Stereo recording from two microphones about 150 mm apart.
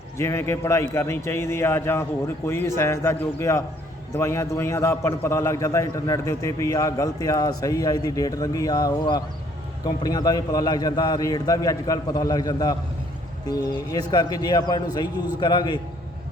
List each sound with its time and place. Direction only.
0.2 s a man's voice: 15° left (ahead or behind)